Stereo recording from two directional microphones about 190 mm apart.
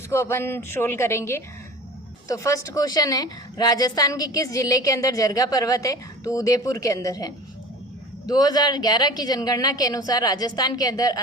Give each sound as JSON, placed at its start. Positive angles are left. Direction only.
{"t": 0.1, "sound": "a woman's voice", "side_deg": 15}